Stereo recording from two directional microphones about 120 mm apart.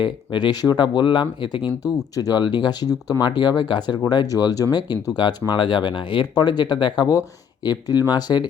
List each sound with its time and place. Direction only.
0.0 s speech: 40° left (ahead or behind)